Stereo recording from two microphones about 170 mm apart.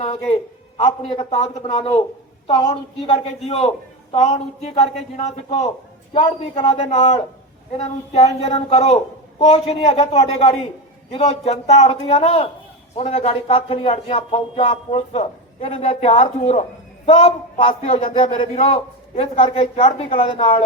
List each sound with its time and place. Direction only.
0.0 s a man's voice: 35° left (ahead or behind)